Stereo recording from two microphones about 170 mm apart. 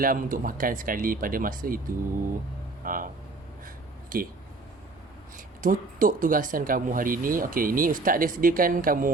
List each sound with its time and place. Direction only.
0.0 s speech: 55° right (ahead or behind)
2.8 s speech: 55° right (ahead or behind)
4.1 s speech: 55° right (ahead or behind)
5.6 s speech: 55° right (ahead or behind)